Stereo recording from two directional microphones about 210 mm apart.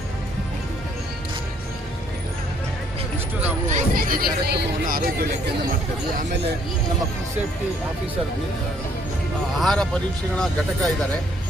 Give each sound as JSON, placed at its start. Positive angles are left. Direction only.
{"t": 3.7, "sound": "speech", "side_deg": -40}
{"t": 9.6, "sound": "speech", "side_deg": 0}